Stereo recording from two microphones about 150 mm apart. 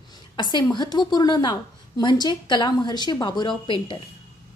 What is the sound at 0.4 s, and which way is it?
A woman's voice, 30° left (ahead or behind).